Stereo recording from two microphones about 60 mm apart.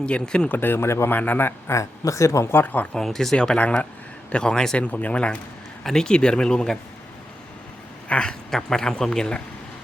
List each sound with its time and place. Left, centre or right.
0.0 s speech: centre
0.4 s speech: left
1.1 s speech: left
1.7 s speech: left
2.5 s speech: left
3.0 s speech: centre
4.8 s speech: left
8.0 s speech: centre